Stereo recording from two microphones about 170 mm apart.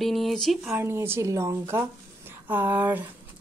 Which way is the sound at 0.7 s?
15° right (ahead or behind).